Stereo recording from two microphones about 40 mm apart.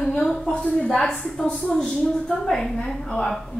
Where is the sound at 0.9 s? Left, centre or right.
Centre.